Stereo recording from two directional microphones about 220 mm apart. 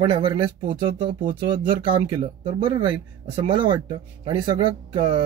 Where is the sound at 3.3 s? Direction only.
25° right (ahead or behind).